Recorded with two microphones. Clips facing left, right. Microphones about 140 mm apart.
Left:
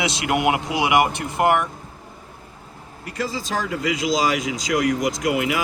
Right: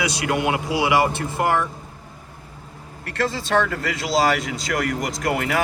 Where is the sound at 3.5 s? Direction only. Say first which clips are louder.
Right 8 dB; 80° right.